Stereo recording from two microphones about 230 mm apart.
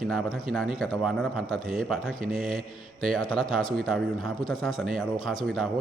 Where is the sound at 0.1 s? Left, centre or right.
Centre.